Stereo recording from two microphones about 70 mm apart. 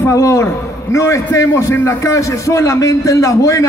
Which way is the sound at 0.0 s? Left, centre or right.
Left.